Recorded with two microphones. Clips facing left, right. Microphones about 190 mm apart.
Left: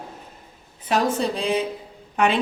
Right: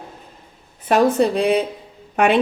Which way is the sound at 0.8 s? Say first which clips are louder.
Right 6 dB; 60° right (ahead or behind).